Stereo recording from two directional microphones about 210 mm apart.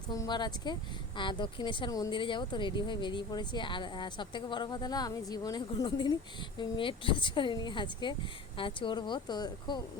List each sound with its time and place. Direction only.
0.1 s a woman's voice: 20° left (ahead or behind)